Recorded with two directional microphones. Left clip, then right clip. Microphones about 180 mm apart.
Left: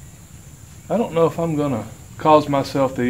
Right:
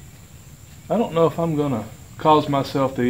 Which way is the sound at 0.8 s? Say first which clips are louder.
Left 1 dB; 35° right (ahead or behind).